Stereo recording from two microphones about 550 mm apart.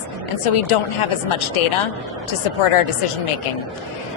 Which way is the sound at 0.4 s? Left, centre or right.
Left.